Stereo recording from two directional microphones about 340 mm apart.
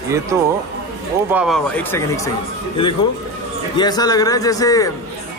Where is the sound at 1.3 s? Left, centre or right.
Centre.